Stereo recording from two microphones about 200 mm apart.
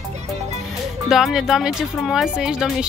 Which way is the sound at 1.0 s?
Centre (ahead or behind).